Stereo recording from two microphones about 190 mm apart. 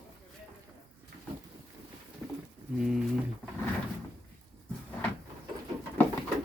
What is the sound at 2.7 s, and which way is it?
Speech, 5° right (ahead or behind).